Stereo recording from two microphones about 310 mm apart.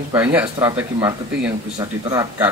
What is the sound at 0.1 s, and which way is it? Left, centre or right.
Speech, centre.